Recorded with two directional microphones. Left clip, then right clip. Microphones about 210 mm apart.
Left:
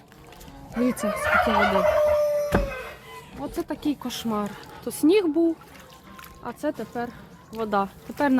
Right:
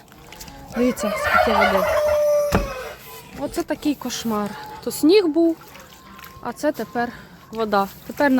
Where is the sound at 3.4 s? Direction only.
20° right (ahead or behind).